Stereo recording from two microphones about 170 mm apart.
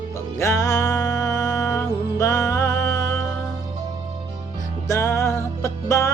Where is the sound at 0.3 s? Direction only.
15° left (ahead or behind).